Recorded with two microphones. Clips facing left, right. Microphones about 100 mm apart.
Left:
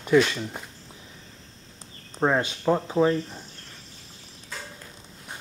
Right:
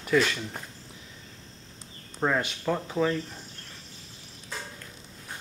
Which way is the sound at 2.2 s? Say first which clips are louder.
Left 4 dB; 20° left (ahead or behind).